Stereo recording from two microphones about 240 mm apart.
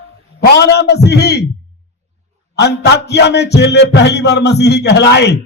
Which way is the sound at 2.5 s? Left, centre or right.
Left.